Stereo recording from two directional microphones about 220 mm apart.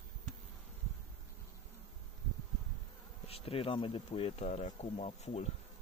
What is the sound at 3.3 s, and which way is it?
Speech, 25° left (ahead or behind).